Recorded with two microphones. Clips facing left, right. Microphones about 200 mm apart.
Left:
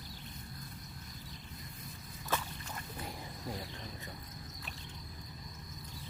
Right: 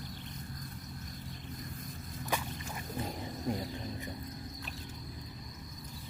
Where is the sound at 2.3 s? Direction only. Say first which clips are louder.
Right 1 dB; 15° right (ahead or behind).